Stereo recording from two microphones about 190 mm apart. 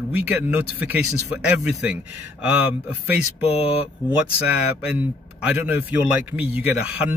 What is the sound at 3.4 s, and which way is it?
Speech, 30° left (ahead or behind).